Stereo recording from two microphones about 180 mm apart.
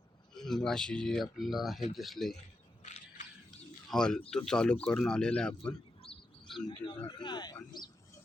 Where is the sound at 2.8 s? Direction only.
40° left (ahead or behind).